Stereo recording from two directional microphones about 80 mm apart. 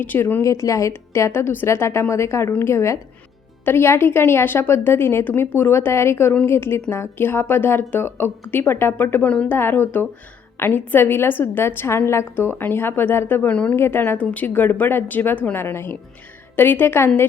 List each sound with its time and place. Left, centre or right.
0.0 s a woman's voice: left
0.4 s a woman's voice: left
14.2 s a woman's voice: centre